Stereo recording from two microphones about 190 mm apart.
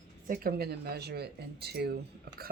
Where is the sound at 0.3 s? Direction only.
50° right (ahead or behind).